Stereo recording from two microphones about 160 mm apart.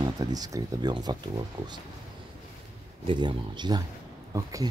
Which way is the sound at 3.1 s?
30° right (ahead or behind).